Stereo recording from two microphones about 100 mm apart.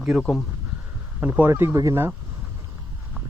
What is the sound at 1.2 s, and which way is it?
Speech, 15° right (ahead or behind).